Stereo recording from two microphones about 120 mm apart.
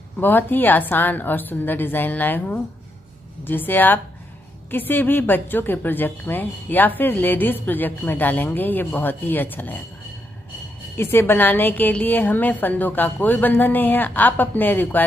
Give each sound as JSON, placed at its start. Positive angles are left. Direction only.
{"t": 0.2, "sound": "a woman's voice", "side_deg": 15}
{"t": 11.0, "sound": "a woman's voice", "side_deg": 20}